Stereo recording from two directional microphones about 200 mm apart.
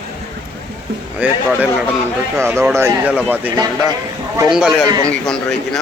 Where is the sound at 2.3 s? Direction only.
15° right (ahead or behind).